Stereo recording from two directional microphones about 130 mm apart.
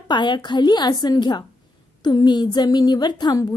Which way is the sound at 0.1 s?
35° left (ahead or behind).